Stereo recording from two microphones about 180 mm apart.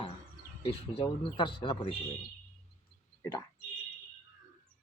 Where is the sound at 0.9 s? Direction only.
25° left (ahead or behind).